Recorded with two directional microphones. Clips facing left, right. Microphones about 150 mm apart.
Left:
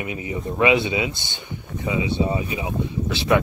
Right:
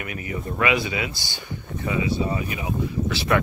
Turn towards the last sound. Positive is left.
turn(degrees=20)  # may be behind; listen again after turning